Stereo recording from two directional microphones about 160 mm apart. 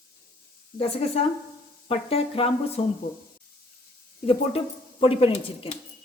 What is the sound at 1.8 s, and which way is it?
Speech, 35° left (ahead or behind).